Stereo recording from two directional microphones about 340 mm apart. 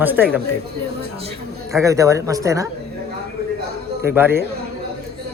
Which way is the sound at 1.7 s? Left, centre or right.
Centre.